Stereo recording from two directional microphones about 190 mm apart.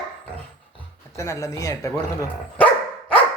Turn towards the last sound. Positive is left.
turn(degrees=5)  # may be behind; listen again after turning